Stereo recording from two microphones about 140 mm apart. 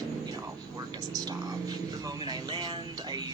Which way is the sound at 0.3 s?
25° right (ahead or behind).